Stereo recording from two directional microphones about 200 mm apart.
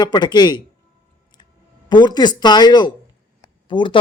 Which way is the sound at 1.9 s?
20° left (ahead or behind).